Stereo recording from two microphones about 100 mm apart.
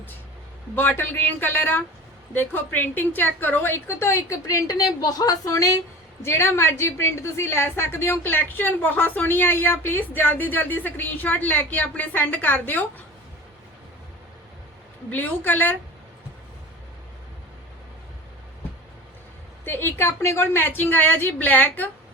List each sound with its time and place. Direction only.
0.8 s a woman's voice: 20° left (ahead or behind); by 5.7 s 35° left (ahead or behind)
6.2 s a woman's voice: 25° left (ahead or behind)
15.1 s a woman's voice: 20° left (ahead or behind)
19.6 s a woman's voice: 20° left (ahead or behind)